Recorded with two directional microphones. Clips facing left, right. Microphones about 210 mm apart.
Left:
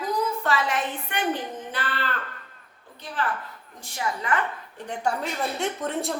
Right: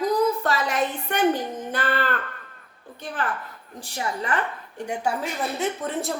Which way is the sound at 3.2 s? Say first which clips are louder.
Even; 50° right (ahead or behind).